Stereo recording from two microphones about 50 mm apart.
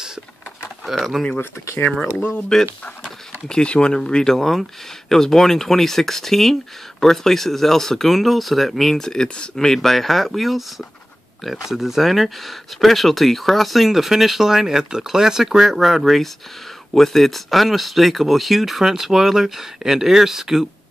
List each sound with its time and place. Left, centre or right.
1.1 s speech: centre
2.5 s speech: centre